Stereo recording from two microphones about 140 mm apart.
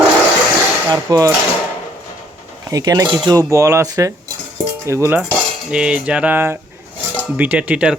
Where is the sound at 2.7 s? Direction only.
30° right (ahead or behind).